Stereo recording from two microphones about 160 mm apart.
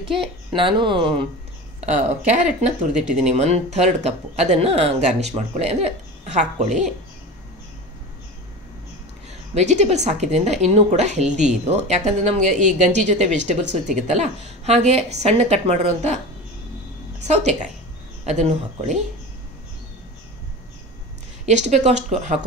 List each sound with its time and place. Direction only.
0.1 s speech: centre (ahead or behind)
0.6 s speech: 30° right (ahead or behind)
2.2 s speech: 50° right (ahead or behind)
9.5 s speech: 45° right (ahead or behind)
17.4 s speech: 45° right (ahead or behind)
21.5 s speech: 45° right (ahead or behind)